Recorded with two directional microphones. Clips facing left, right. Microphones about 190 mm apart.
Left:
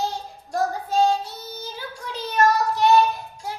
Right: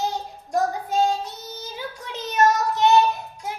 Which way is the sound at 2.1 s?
20° right (ahead or behind).